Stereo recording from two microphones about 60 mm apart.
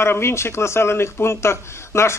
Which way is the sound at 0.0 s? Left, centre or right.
Left.